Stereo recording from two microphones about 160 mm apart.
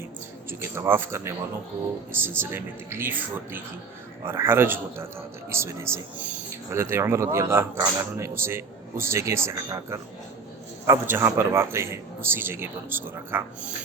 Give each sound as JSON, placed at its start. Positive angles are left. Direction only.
{"t": 0.6, "sound": "a man's voice", "side_deg": -15}